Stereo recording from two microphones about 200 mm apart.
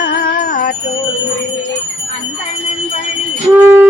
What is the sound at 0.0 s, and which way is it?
Music, 45° left (ahead or behind).